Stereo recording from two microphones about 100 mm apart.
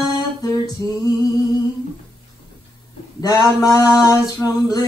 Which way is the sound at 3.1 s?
35° left (ahead or behind).